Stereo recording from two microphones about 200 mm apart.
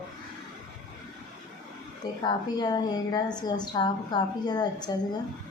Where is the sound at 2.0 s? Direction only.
20° left (ahead or behind).